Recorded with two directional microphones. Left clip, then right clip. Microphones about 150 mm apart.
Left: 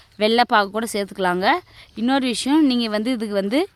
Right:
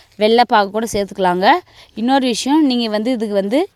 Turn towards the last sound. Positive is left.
turn(degrees=-15)  # may be behind; listen again after turning